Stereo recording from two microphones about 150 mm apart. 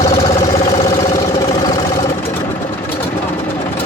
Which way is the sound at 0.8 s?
25° left (ahead or behind).